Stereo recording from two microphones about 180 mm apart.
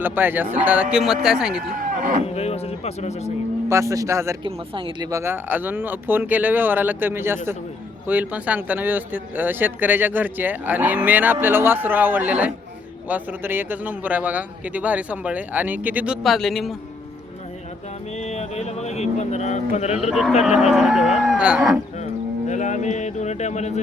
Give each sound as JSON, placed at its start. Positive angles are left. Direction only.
{"t": 0.0, "sound": "speech", "side_deg": -10}
{"t": 1.7, "sound": "speech", "side_deg": -50}
{"t": 2.2, "sound": "speech", "side_deg": 35}
{"t": 3.7, "sound": "speech", "side_deg": -15}
{"t": 4.4, "sound": "speech", "side_deg": -30}
{"t": 5.1, "sound": "speech", "side_deg": -15}
{"t": 18.2, "sound": "speech", "side_deg": 40}
{"t": 20.1, "sound": "speech", "side_deg": 0}
{"t": 22.0, "sound": "cattle", "side_deg": 40}